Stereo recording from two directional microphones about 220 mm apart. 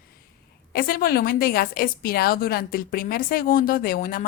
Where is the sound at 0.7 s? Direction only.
40° left (ahead or behind).